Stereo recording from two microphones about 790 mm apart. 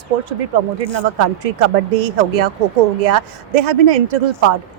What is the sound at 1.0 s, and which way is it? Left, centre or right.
A woman's voice, right.